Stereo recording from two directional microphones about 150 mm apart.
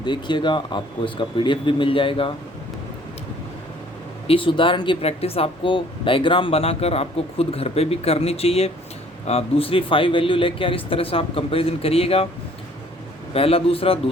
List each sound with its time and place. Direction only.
0.0 s speech: 30° left (ahead or behind)
4.3 s speech: 35° left (ahead or behind)
13.3 s speech: 40° left (ahead or behind)